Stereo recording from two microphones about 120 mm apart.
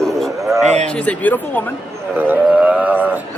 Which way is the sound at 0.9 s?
10° left (ahead or behind).